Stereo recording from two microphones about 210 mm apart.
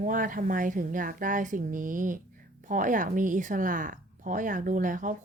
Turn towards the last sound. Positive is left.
turn(degrees=-40)  # may be behind; listen again after turning